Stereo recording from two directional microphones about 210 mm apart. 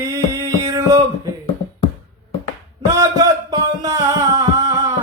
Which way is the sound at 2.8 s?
15° right (ahead or behind).